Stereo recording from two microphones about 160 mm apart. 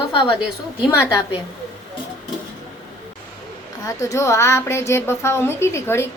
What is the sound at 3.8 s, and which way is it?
A woman's voice, 20° left (ahead or behind).